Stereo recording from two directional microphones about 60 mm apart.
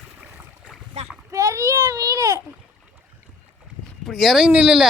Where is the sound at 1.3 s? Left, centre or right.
Right.